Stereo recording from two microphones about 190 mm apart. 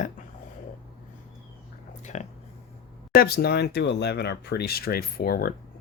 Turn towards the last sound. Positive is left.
turn(degrees=50)  # may be behind; listen again after turning